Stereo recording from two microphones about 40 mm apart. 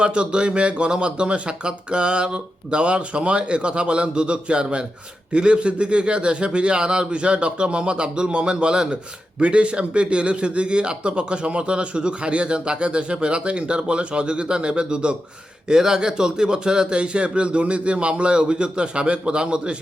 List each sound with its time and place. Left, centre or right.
0.0 s a man's voice: right